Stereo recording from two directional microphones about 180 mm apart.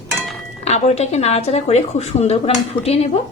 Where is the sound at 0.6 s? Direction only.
40° left (ahead or behind).